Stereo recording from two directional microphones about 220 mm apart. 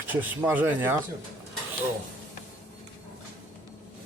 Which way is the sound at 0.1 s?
10° right (ahead or behind).